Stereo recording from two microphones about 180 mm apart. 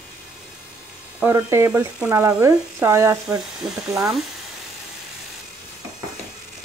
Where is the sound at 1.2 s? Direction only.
15° right (ahead or behind).